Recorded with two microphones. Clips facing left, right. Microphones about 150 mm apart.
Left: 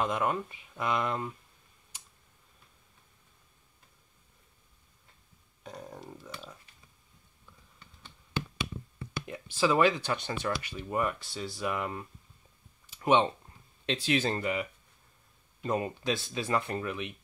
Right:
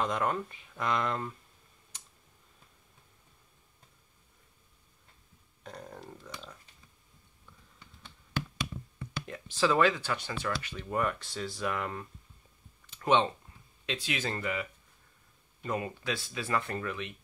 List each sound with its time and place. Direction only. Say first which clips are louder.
0.0 s speech: left 1 dB; 10° left (ahead or behind)
5.6 s a sound: left 1 dB; 5° left (ahead or behind)
9.3 s speech: left 1 dB; 10° left (ahead or behind)
13.8 s speech: left 6 dB; 30° left (ahead or behind)